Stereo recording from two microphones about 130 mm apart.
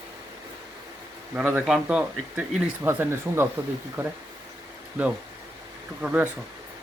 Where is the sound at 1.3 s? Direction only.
15° right (ahead or behind).